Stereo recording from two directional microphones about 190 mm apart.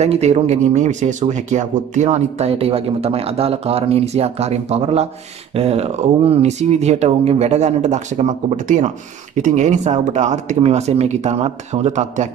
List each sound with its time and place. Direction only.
0.0 s speech: 35° right (ahead or behind)